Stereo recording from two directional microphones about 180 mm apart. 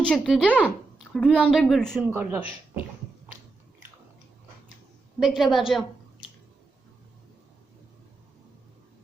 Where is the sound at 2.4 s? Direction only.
30° left (ahead or behind).